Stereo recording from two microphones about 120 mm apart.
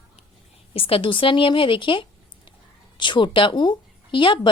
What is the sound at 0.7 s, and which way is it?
Speech, 50° left (ahead or behind).